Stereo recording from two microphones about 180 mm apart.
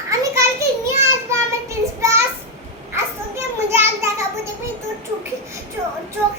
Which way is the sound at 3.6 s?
15° right (ahead or behind).